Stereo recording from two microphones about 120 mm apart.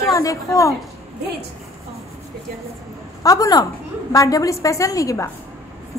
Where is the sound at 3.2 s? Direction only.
30° left (ahead or behind).